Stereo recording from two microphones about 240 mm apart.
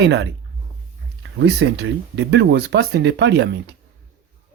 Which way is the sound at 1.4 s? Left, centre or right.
Right.